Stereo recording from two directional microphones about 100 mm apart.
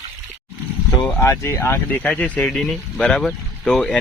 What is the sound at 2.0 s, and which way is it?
Speech, 15° left (ahead or behind).